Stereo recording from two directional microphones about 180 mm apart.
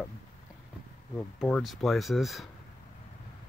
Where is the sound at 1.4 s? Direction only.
5° left (ahead or behind).